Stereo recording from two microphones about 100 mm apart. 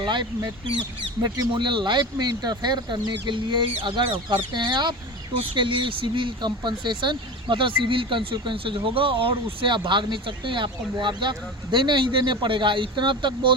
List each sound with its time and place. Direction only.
0.0 s speech: 50° right (ahead or behind)